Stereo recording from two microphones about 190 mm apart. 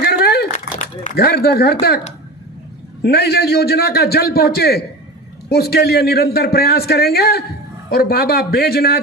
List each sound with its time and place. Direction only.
0.0 s a sound: 55° left (ahead or behind)
1.0 s a man's voice: 55° left (ahead or behind)
3.0 s a man's voice: 55° left (ahead or behind)